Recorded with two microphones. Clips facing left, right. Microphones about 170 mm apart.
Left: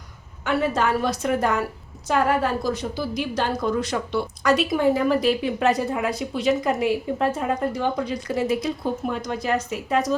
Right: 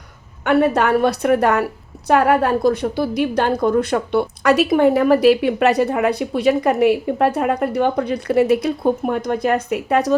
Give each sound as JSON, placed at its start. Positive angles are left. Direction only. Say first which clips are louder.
{"t": 0.4, "sound": "a woman's voice", "louder": "right 7 dB", "side_deg": -60}